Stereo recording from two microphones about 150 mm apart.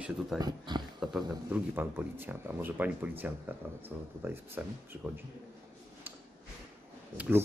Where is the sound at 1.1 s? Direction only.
10° right (ahead or behind).